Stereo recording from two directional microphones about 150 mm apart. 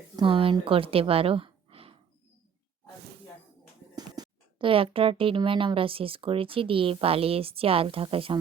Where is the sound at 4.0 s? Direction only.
30° right (ahead or behind).